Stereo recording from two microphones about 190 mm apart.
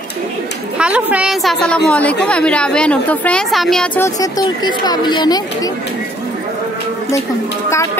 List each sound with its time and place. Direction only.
0.7 s a woman's voice: 5° right (ahead or behind)
4.2 s speech: 20° left (ahead or behind)
7.7 s music: 15° left (ahead or behind)